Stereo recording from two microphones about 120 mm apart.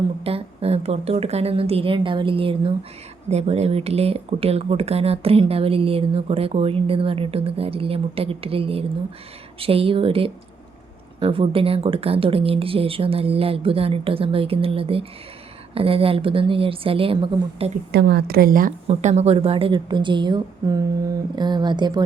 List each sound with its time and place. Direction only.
0.3 s speech: 55° right (ahead or behind)
3.2 s speech: 60° right (ahead or behind); by 17.7 s 45° right (ahead or behind)
18.9 s speech: 65° right (ahead or behind); by 22.0 s 40° right (ahead or behind)